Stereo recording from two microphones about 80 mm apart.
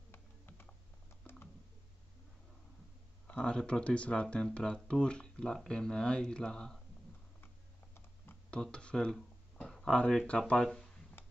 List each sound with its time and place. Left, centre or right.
0.1 s computer keyboard: left
1.3 s typing: left
3.3 s speech: centre
8.7 s speech: centre
11.2 s tick-tock: left